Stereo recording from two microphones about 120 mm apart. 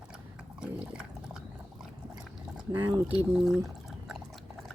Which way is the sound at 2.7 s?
15° right (ahead or behind).